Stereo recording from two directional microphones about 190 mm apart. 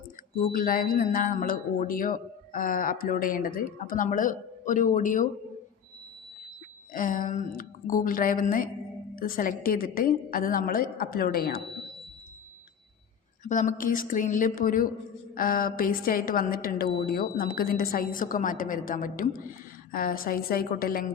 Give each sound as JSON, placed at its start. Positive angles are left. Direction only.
{"t": 0.5, "sound": "a man's voice", "side_deg": 45}
{"t": 6.9, "sound": "a man's voice", "side_deg": 45}
{"t": 13.4, "sound": "a man's voice", "side_deg": 40}